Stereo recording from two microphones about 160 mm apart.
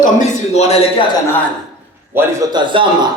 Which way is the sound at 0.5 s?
40° left (ahead or behind).